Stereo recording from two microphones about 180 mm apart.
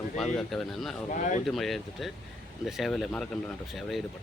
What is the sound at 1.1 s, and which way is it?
Speech, 45° left (ahead or behind).